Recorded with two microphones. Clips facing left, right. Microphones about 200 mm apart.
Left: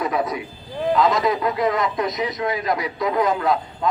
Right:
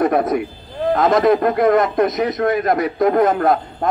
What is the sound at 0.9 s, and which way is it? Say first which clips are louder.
A man's voice: right 6 dB; 50° right (ahead or behind).